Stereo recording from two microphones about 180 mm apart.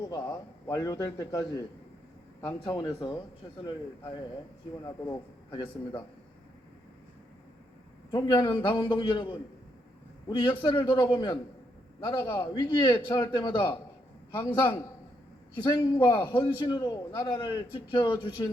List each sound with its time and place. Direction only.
0.0 s a man's voice: 20° left (ahead or behind)
4.8 s a man's voice: 20° left (ahead or behind)
8.1 s a man's voice: 25° left (ahead or behind)
10.6 s a man's voice: 30° left (ahead or behind)